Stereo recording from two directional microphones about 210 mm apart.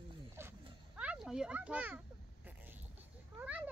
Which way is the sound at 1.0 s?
5° right (ahead or behind).